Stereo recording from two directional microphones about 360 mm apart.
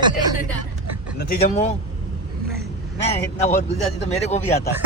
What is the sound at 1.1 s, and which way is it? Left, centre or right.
Speech, left.